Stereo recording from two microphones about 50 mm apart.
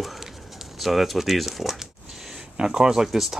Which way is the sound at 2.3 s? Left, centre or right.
Centre.